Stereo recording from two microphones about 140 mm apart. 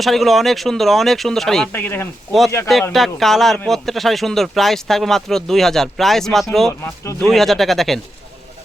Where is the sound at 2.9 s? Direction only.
Centre (ahead or behind).